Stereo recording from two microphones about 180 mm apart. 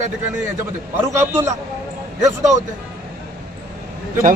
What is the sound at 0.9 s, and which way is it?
Speech, 15° right (ahead or behind).